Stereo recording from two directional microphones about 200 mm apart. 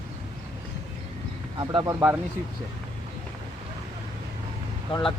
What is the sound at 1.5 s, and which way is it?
Speech, 20° right (ahead or behind).